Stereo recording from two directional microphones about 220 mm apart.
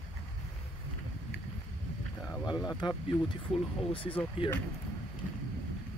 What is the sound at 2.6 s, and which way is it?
Speech, 20° left (ahead or behind).